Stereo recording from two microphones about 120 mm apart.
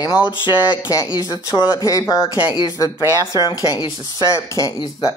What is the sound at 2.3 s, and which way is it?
Speech, 40° left (ahead or behind).